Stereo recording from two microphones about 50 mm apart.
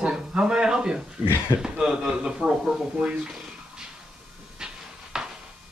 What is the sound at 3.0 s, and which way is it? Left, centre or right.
Speech, right.